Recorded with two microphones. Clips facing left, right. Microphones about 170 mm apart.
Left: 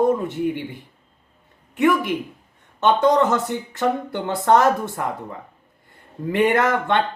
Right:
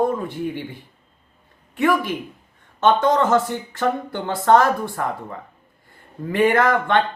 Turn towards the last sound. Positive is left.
turn(degrees=20)  # may be behind; listen again after turning